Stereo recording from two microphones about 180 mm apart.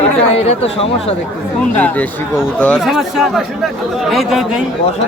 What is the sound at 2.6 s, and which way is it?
Speech, 5° left (ahead or behind).